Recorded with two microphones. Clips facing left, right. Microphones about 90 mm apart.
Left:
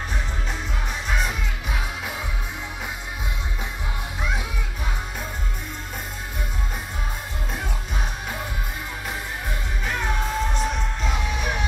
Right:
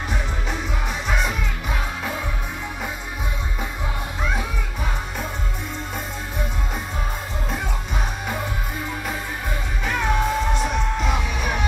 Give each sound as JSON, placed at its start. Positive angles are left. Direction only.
{"t": 9.8, "sound": "music", "side_deg": 0}